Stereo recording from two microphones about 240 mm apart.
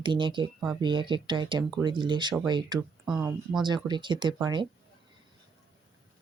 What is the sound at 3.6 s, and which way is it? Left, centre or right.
A woman's voice, centre.